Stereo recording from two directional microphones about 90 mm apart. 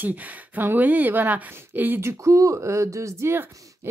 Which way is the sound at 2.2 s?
35° right (ahead or behind).